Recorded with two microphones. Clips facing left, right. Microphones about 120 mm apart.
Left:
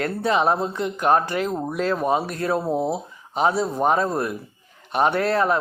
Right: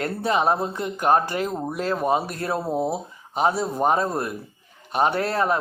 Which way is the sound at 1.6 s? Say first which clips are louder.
Even; 35° right (ahead or behind).